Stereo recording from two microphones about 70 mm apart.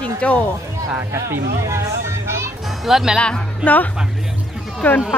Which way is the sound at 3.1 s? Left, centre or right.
Centre.